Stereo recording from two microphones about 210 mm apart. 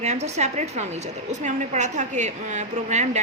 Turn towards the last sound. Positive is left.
turn(degrees=-35)  # may be behind; listen again after turning